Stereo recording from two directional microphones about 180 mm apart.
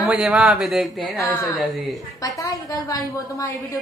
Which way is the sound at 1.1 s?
15° left (ahead or behind).